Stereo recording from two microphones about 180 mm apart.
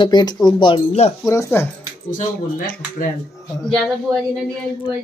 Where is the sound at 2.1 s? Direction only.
45° left (ahead or behind).